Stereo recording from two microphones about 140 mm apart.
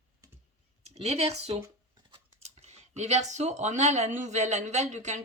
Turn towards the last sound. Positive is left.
turn(degrees=-55)  # may be behind; listen again after turning